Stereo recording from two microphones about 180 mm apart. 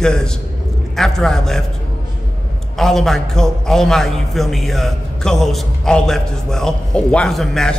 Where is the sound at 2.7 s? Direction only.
Centre (ahead or behind).